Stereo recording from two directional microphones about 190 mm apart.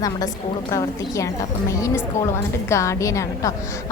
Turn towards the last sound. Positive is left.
turn(degrees=15)  # may be behind; listen again after turning